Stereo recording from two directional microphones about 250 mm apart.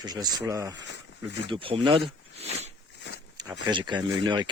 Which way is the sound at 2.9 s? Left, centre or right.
Left.